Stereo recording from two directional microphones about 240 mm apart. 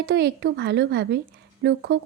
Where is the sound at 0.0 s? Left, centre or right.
Right.